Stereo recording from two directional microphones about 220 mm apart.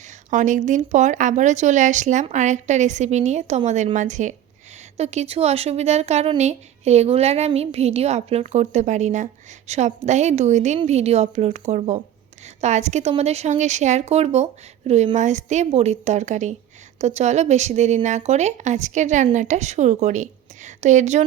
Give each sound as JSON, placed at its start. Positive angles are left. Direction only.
{"t": 0.3, "sound": "speech", "side_deg": -35}